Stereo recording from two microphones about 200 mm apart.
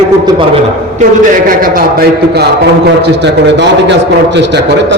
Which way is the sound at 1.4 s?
45° right (ahead or behind).